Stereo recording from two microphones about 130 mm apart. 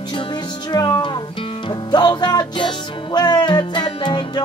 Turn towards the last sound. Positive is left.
turn(degrees=35)  # may be behind; listen again after turning